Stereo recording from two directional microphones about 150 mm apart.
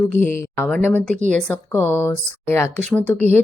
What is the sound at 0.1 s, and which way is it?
Speech, 15° left (ahead or behind).